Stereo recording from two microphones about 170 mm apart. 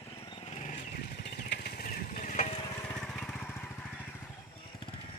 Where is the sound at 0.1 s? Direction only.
30° left (ahead or behind); by 1.2 s 45° left (ahead or behind).